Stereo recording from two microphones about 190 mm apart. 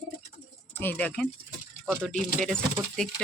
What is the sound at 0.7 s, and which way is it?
Speech, 10° left (ahead or behind).